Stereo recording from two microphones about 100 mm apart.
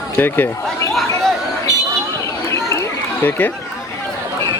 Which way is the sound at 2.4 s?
30° left (ahead or behind).